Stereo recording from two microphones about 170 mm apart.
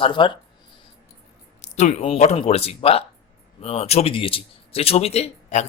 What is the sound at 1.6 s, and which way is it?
A man's voice, 40° left (ahead or behind).